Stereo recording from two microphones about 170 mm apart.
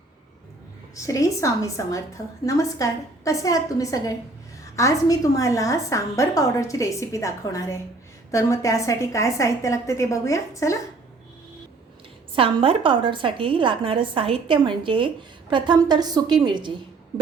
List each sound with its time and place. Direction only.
0.9 s a woman's voice: 20° left (ahead or behind)
12.3 s a woman's voice: 30° right (ahead or behind)